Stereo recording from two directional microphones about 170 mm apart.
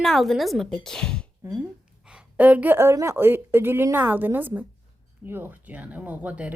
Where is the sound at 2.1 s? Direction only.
5° right (ahead or behind).